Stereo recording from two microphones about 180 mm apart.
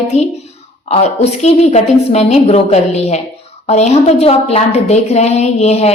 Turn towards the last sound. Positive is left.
turn(degrees=35)  # may be behind; listen again after turning